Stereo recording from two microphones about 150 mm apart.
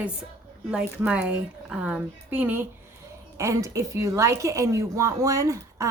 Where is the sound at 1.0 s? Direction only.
10° right (ahead or behind).